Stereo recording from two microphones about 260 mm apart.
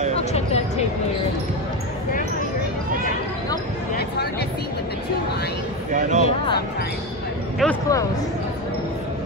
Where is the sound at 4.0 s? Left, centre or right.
Left.